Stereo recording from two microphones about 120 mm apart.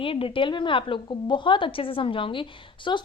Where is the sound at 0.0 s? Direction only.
50° left (ahead or behind).